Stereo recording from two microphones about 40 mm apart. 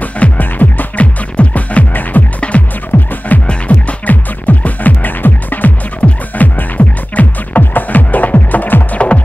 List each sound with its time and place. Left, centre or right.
0.4 s music: left
1.3 s music: left
2.1 s music: left
2.5 s music: left
2.9 s music: left
3.4 s music: left
8.9 s music: left